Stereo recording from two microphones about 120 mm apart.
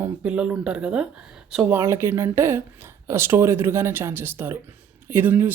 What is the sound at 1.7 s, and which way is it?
Speech, 20° right (ahead or behind).